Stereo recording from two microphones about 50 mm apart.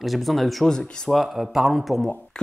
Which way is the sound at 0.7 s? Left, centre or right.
Centre.